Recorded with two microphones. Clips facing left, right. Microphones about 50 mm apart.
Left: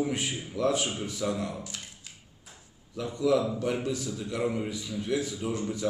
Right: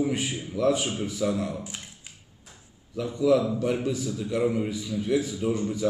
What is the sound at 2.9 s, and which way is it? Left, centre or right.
A man's voice, centre.